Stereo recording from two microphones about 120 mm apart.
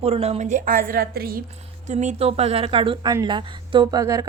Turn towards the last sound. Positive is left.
turn(degrees=-30)  # may be behind; listen again after turning